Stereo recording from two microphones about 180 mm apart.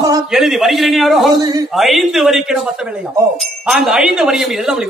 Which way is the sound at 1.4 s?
20° right (ahead or behind).